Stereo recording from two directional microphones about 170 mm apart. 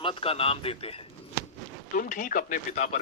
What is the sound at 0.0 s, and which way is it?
Speech, 30° left (ahead or behind).